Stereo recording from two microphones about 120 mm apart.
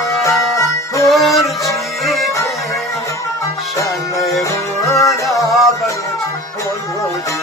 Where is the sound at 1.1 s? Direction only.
Centre (ahead or behind).